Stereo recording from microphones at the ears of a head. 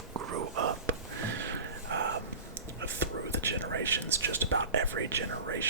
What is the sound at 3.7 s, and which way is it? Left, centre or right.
Whispering, right.